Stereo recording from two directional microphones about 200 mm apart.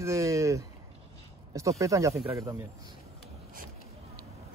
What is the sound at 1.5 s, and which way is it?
Speech, 15° right (ahead or behind).